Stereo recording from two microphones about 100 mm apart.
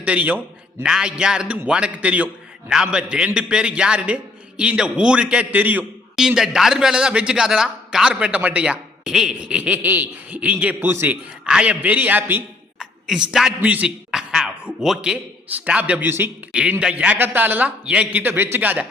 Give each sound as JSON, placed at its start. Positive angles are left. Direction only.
{"t": 0.0, "sound": "a man's voice", "side_deg": -15}
{"t": 6.1, "sound": "a man's voice", "side_deg": -5}
{"t": 11.4, "sound": "a man's voice", "side_deg": -10}
{"t": 13.1, "sound": "a man's voice", "side_deg": -5}
{"t": 13.6, "sound": "a sound", "side_deg": -15}
{"t": 14.8, "sound": "a man's voice", "side_deg": -5}
{"t": 15.4, "sound": "a man's voice", "side_deg": -15}
{"t": 16.5, "sound": "a man's voice", "side_deg": -10}